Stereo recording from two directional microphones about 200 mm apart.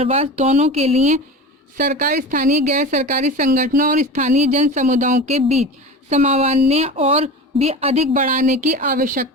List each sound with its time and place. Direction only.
0.0 s speech: 30° right (ahead or behind)
1.8 s speech: 45° right (ahead or behind)